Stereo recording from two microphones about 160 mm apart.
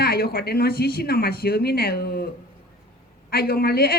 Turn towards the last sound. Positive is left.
turn(degrees=80)